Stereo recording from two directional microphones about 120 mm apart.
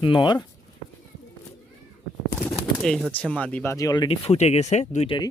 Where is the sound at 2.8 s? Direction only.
Centre (ahead or behind).